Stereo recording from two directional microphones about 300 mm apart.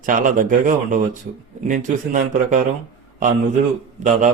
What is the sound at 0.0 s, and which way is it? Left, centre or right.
A man's voice, right.